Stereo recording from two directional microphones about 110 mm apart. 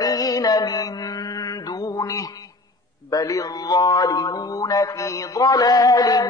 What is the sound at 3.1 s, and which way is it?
A man's voice, 35° left (ahead or behind).